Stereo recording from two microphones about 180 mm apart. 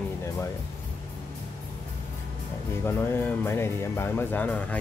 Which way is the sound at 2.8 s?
10° left (ahead or behind).